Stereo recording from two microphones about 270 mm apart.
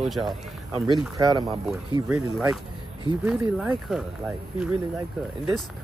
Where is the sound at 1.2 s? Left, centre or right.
Centre.